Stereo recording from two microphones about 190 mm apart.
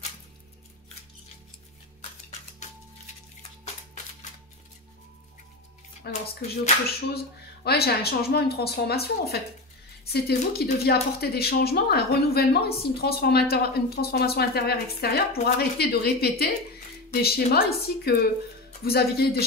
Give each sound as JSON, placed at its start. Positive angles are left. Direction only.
{"t": 3.6, "sound": "music", "side_deg": 35}
{"t": 6.0, "sound": "speech", "side_deg": 60}